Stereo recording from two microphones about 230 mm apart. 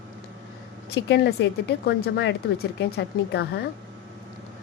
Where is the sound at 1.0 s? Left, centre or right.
Left.